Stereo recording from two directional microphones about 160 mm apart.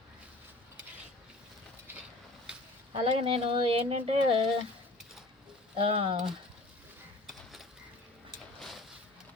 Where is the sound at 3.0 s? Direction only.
35° right (ahead or behind).